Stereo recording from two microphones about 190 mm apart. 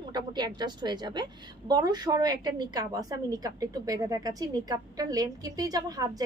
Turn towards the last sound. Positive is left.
turn(degrees=-20)  # may be behind; listen again after turning